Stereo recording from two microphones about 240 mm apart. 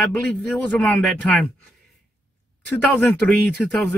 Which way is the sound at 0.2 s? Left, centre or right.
Centre.